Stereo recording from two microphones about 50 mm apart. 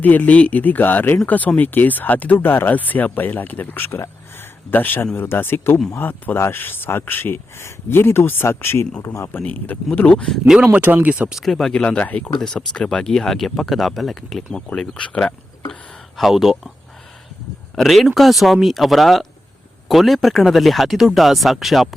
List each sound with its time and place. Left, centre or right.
0.0 s speech: left
6.0 s speech: left
9.0 s a man's voice: left
9.4 s speech: left
10.4 s speech: centre
10.7 s speech: right
11.3 s speech: centre
11.7 s speech: left
12.4 s speech: centre
14.9 s speech: centre
16.1 s speech: centre
17.7 s speech: centre